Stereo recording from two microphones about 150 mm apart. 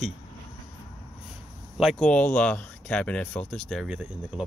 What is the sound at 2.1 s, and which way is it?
Speech, 10° left (ahead or behind).